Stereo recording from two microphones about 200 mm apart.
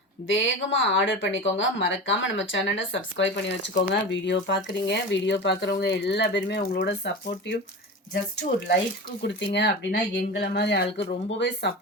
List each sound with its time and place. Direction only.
0.3 s speech: 70° left (ahead or behind); by 7.1 s 55° left (ahead or behind)
8.1 s speech: 55° left (ahead or behind)